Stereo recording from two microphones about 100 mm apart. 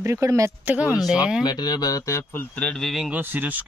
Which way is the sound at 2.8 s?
Centre (ahead or behind).